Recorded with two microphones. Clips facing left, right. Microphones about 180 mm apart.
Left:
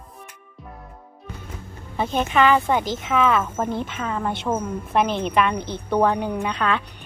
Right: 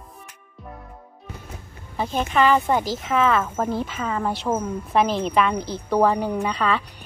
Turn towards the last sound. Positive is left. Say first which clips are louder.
# right 1 dB
turn(degrees=0)  # may be behind; listen again after turning